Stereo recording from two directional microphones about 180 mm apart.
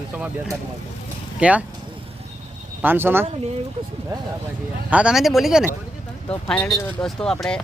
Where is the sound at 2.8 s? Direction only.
10° right (ahead or behind).